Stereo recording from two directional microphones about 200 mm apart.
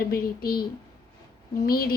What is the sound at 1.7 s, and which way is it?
Speech, 50° left (ahead or behind).